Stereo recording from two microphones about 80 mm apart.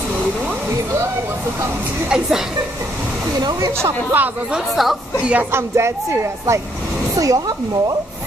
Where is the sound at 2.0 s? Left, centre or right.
Centre.